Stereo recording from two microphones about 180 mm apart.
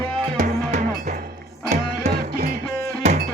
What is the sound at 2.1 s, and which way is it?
Music, 55° right (ahead or behind).